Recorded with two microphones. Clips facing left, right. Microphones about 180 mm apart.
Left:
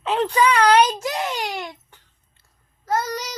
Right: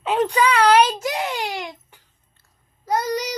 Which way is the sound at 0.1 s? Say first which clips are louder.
Even; 15° right (ahead or behind).